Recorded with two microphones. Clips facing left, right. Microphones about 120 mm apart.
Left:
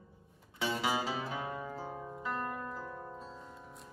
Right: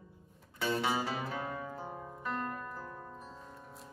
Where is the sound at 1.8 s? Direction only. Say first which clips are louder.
Left 1 dB; 5° right (ahead or behind).